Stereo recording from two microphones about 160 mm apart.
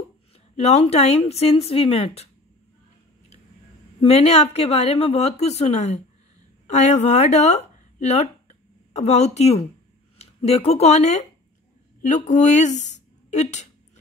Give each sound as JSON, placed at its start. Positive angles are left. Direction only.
{"t": 0.6, "sound": "speech", "side_deg": 40}
{"t": 4.0, "sound": "speech", "side_deg": 40}
{"t": 12.8, "sound": "a sound", "side_deg": 45}